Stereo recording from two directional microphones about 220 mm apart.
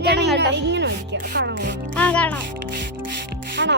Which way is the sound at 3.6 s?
55° right (ahead or behind).